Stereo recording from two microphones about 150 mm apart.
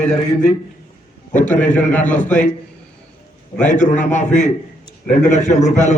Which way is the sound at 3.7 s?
55° left (ahead or behind).